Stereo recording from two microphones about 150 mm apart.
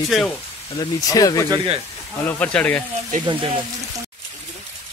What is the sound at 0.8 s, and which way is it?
Speech, 25° left (ahead or behind).